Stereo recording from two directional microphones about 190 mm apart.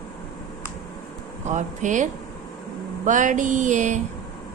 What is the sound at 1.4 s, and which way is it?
Speech, 40° right (ahead or behind).